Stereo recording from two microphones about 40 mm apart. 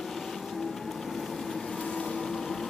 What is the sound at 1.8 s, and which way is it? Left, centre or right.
Vehicle, left.